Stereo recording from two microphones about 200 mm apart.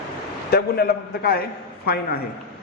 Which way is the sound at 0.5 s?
50° left (ahead or behind).